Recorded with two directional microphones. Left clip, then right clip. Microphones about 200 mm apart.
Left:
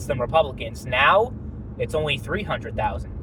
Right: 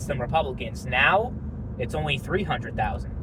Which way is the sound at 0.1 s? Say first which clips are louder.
Left 5 dB; 30° left (ahead or behind).